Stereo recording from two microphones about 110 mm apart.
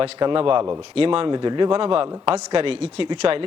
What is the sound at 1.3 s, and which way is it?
A man's voice, 40° right (ahead or behind).